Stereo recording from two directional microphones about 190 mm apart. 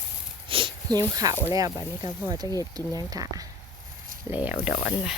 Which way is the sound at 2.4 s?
20° left (ahead or behind).